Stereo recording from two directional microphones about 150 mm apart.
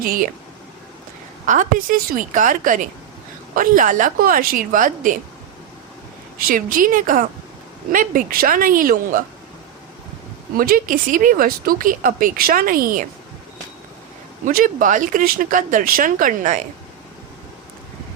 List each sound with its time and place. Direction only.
0.0 s speech: 75° right (ahead or behind)
1.5 s speech: 60° right (ahead or behind)
6.4 s speech: 70° right (ahead or behind)
10.6 s speech: 70° right (ahead or behind)
14.4 s speech: 60° right (ahead or behind)